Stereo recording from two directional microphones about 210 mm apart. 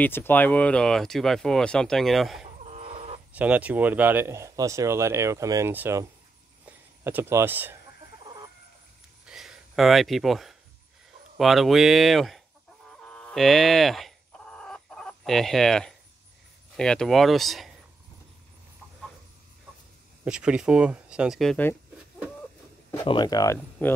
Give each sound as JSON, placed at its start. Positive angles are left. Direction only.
{"t": 0.0, "sound": "speech", "side_deg": 10}
{"t": 2.6, "sound": "chicken", "side_deg": -30}
{"t": 3.3, "sound": "speech", "side_deg": -5}
{"t": 6.6, "sound": "a sound", "side_deg": -10}
{"t": 9.2, "sound": "a sound", "side_deg": -5}
{"t": 11.3, "sound": "speech", "side_deg": 0}
{"t": 12.8, "sound": "fowl", "side_deg": 5}
{"t": 16.7, "sound": "speech", "side_deg": 5}
{"t": 20.2, "sound": "speech", "side_deg": -5}
{"t": 23.0, "sound": "speech", "side_deg": 20}